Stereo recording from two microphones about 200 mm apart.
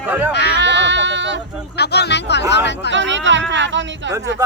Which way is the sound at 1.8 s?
55° left (ahead or behind).